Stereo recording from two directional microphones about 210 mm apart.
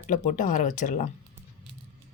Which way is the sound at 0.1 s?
35° left (ahead or behind).